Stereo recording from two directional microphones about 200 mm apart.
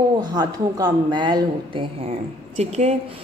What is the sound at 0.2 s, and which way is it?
A woman's voice, 20° right (ahead or behind).